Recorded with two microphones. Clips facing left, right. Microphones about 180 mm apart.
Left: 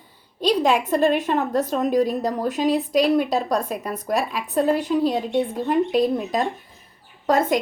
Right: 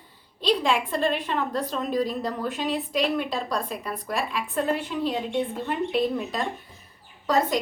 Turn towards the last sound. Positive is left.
turn(degrees=50)  # may be behind; listen again after turning